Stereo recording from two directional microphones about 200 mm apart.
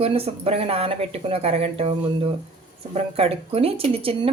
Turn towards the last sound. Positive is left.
turn(degrees=-30)  # may be behind; listen again after turning